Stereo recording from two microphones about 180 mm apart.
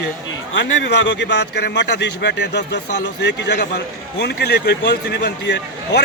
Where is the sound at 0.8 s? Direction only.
80° left.